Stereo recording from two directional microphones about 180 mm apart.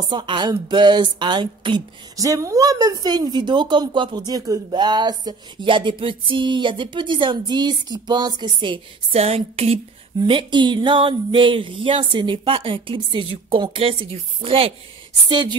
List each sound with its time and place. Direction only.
0.1 s speech: 25° right (ahead or behind)